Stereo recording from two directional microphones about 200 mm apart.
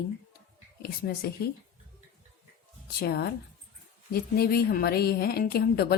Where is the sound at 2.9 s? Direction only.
50° left (ahead or behind).